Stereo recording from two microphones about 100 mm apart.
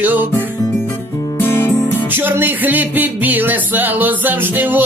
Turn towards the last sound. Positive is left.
turn(degrees=-20)  # may be behind; listen again after turning